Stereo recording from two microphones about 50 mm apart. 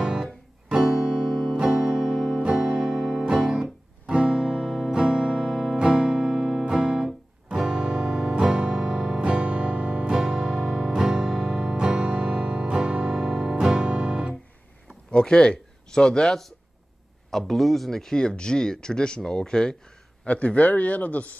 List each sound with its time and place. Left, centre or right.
0.0 s music: centre
2.9 s music: centre
5.5 s music: centre
9.2 s music: right
10.1 s music: centre
15.0 s speech: left; by 18.1 s centre
18.1 s speech: centre
20.2 s a man's voice: left